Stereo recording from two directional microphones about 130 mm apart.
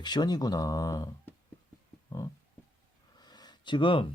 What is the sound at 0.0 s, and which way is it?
Speech, 30° left (ahead or behind).